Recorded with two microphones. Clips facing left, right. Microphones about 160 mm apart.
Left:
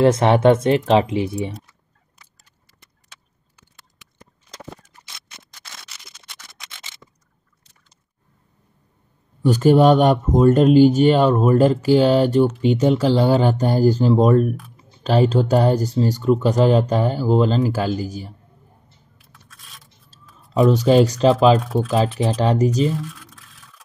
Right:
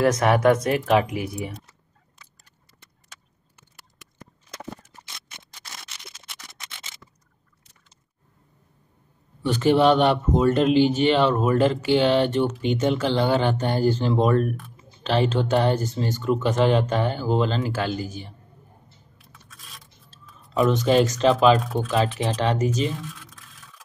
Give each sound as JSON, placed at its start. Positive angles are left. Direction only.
{"t": 0.0, "sound": "speech", "side_deg": 25}
{"t": 5.9, "sound": "single-lens reflex camera", "side_deg": -5}
{"t": 9.4, "sound": "speech", "side_deg": 40}
{"t": 19.1, "sound": "scrape", "side_deg": 0}
{"t": 20.1, "sound": "a sound", "side_deg": 40}
{"t": 20.8, "sound": "speech", "side_deg": 35}
{"t": 21.5, "sound": "speech", "side_deg": 0}
{"t": 22.4, "sound": "speech", "side_deg": 35}
{"t": 22.8, "sound": "scratch", "side_deg": 0}